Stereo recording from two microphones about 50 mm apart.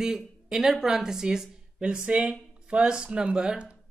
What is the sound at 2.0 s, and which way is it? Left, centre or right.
Speech, right.